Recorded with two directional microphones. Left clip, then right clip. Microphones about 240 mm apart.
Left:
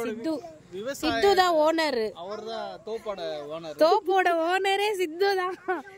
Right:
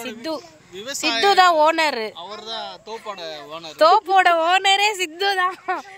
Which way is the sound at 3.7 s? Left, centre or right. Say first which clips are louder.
Right 7 dB; centre.